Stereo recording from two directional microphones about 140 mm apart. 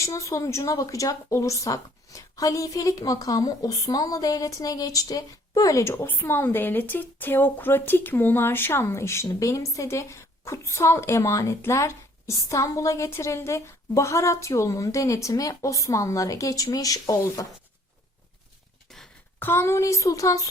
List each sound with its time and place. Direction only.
0.0 s a woman's voice: 20° left (ahead or behind)
18.9 s a sound: 5° left (ahead or behind)
19.4 s a woman's voice: 15° left (ahead or behind)